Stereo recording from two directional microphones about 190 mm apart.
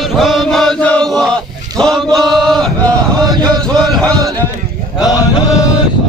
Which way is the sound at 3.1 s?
20° right (ahead or behind).